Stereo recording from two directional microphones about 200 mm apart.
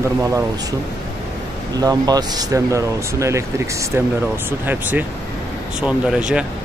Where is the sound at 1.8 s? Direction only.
20° right (ahead or behind).